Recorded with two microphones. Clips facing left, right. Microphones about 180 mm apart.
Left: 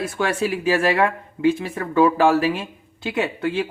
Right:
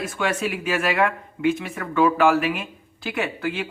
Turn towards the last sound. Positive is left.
turn(degrees=25)  # may be behind; listen again after turning